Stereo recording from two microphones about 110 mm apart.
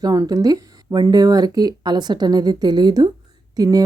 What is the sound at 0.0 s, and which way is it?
A woman's voice, 35° right (ahead or behind).